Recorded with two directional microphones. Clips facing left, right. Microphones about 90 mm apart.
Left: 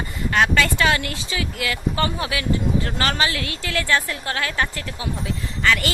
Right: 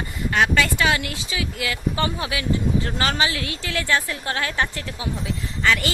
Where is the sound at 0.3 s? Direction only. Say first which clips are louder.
Left 1 dB; 10° right (ahead or behind).